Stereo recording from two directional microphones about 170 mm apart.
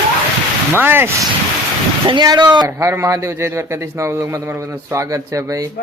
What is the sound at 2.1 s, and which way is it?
Speech, 25° right (ahead or behind).